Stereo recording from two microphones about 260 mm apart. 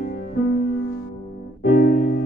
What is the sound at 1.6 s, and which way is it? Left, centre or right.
Piano, left.